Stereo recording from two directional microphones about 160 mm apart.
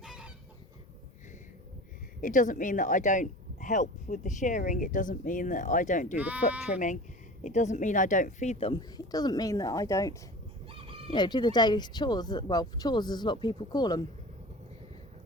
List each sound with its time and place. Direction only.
0.0 s chicken: 5° right (ahead or behind)
2.2 s speech: 55° left (ahead or behind)
6.1 s speech: 10° right (ahead or behind)
6.7 s speech: 50° left (ahead or behind)
9.0 s speech: 25° left (ahead or behind)
10.7 s chicken: 35° right (ahead or behind)
11.1 s speech: 30° left (ahead or behind)